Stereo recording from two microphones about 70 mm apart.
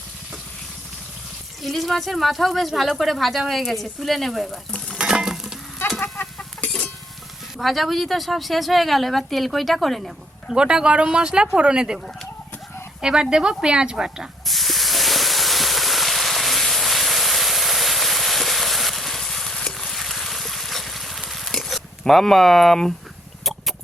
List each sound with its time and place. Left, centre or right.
1.6 s speech: centre
4.9 s stir: centre
6.0 s chicken: left
7.6 s speech: centre
10.5 s speech: centre
13.0 s speech: centre
14.4 s hiss: centre